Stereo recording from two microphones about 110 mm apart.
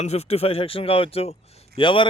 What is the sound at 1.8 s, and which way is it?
Speech, 50° left (ahead or behind).